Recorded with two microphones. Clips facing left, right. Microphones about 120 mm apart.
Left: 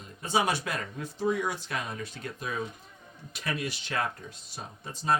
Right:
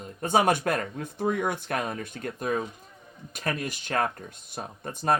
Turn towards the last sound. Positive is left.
turn(degrees=-55)  # may be behind; listen again after turning